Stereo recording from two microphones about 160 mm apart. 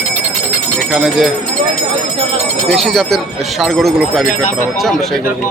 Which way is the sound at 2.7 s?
Centre (ahead or behind).